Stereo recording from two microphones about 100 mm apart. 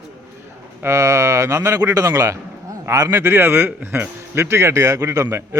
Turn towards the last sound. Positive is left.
turn(degrees=-25)  # may be behind; listen again after turning